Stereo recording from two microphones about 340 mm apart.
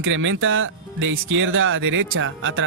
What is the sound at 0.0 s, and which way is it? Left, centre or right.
Speech, right.